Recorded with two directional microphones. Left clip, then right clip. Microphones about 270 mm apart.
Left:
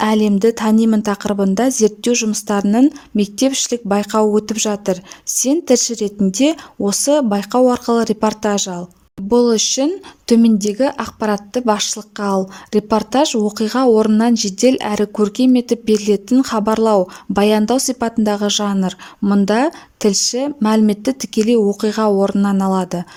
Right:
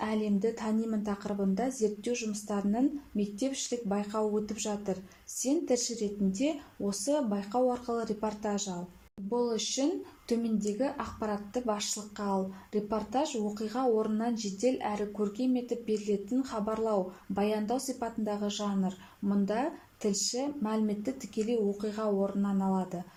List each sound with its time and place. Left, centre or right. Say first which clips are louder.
0.0 s a woman's voice: left 17 dB; left